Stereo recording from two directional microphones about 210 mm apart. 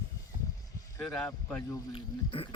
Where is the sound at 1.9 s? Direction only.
25° left (ahead or behind).